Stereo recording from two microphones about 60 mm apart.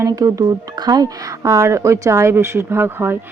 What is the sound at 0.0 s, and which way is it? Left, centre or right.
Speech, right.